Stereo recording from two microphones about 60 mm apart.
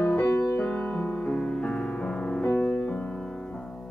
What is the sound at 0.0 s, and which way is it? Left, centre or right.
Music, left.